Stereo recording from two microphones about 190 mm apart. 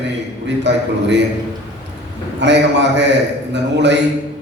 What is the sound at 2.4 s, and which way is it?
A man's voice, 65° right (ahead or behind).